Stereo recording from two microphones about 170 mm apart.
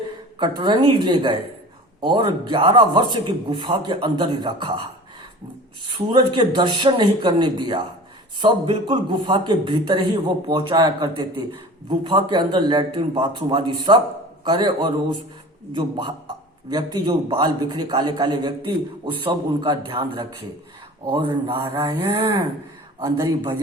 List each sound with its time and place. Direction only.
0.3 s a man's voice: 25° right (ahead or behind)
5.9 s a man's voice: 25° right (ahead or behind)